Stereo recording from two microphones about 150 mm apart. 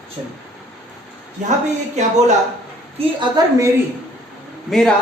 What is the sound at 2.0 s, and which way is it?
Speech, 50° right (ahead or behind).